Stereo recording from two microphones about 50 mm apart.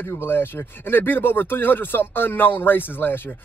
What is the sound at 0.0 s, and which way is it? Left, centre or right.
A man's voice, left.